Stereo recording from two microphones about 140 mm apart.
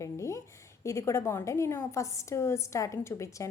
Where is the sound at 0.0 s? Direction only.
20° left (ahead or behind).